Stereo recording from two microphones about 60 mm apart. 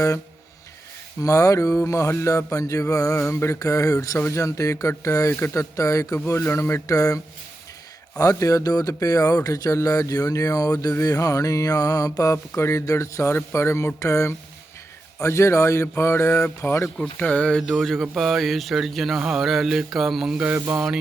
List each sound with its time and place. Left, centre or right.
1.2 s speech: left
3.6 s speech: left
4.2 s speech: left
6.5 s speech: left
6.8 s mantra: left
8.2 s speech: left
11.0 s mantra: left
12.5 s speech: left
13.3 s speech: left
17.0 s speech: left
17.6 s speech: centre
20.4 s mantra: right